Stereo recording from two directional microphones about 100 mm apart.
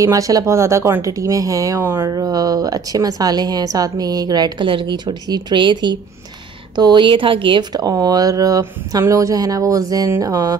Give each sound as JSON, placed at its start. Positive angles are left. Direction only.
{"t": 0.0, "sound": "speech", "side_deg": -35}
{"t": 2.0, "sound": "speech", "side_deg": -40}
{"t": 4.6, "sound": "a woman's voice", "side_deg": -55}
{"t": 7.7, "sound": "speech", "side_deg": -40}